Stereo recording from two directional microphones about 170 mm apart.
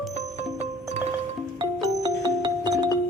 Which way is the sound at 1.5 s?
25° right (ahead or behind).